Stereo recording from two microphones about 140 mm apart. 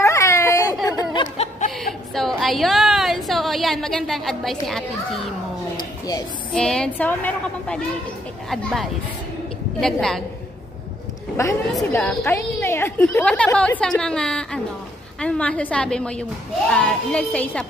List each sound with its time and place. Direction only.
0.0 s baby cry: 20° left (ahead or behind)
0.8 s a sound: 30° left (ahead or behind)
2.1 s a woman's voice: centre (ahead or behind)
5.8 s a sound: 25° left (ahead or behind)
6.5 s a woman's voice: 5° left (ahead or behind)
11.4 s a woman's voice: 20° left (ahead or behind)
11.9 s a woman's voice: 5° left (ahead or behind)
12.4 s a woman's voice: 15° left (ahead or behind)